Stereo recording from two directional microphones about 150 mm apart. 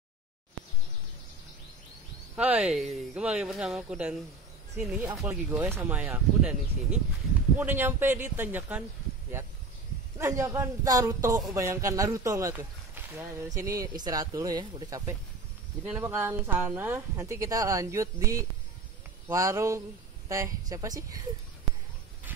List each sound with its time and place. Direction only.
2.3 s speech: 10° right (ahead or behind)
10.1 s speech: 20° right (ahead or behind)
15.8 s speech: 10° right (ahead or behind)